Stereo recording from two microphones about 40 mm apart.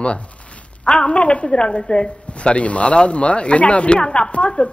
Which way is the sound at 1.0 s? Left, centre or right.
Left.